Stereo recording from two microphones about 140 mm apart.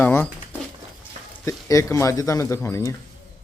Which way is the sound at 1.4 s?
25° left (ahead or behind).